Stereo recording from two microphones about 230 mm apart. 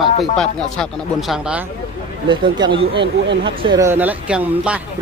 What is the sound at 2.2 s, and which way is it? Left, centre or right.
Speech, centre.